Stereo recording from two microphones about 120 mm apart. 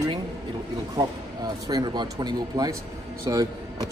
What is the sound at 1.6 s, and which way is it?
Speech, 35° right (ahead or behind).